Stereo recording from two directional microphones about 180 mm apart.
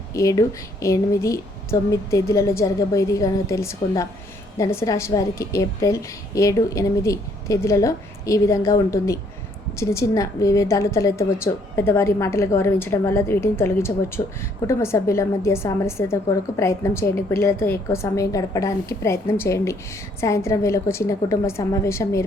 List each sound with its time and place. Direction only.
0.1 s a woman's voice: 20° left (ahead or behind)